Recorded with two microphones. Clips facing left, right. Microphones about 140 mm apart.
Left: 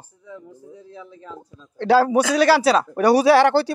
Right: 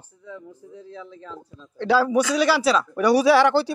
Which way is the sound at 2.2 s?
60° left (ahead or behind).